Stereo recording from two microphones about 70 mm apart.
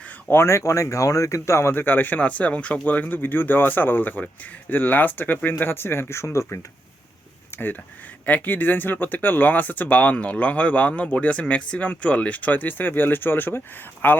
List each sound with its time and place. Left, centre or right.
0.3 s speech: left
7.5 s a sound: left
8.3 s speech: left